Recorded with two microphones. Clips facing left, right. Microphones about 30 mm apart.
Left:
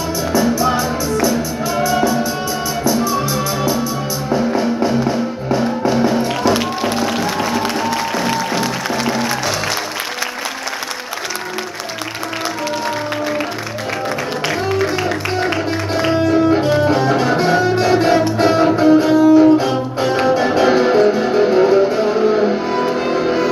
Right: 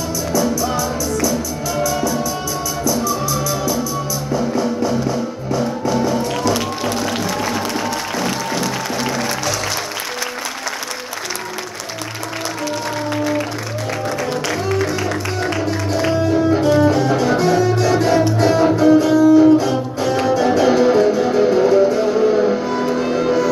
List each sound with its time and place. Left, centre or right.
0.3 s music: left
8.2 s music: centre
14.5 s music: centre